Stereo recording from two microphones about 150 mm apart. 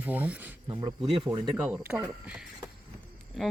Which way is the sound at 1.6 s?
10° right (ahead or behind).